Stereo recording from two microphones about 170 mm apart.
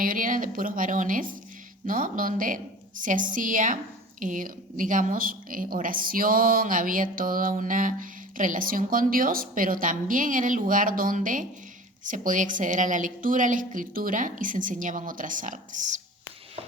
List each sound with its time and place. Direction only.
0.0 s a woman's voice: 55° right (ahead or behind)